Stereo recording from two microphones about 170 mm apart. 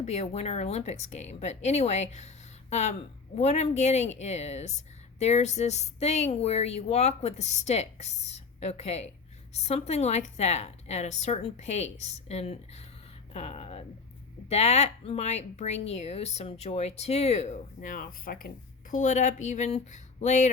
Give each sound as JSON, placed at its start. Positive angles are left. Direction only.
{"t": 0.0, "sound": "speech", "side_deg": 40}